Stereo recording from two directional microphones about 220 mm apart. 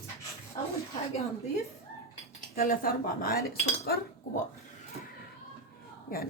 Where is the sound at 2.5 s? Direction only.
40° left (ahead or behind).